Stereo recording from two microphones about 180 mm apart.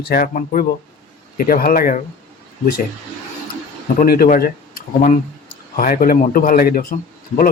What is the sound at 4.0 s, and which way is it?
A man's voice, 50° left (ahead or behind).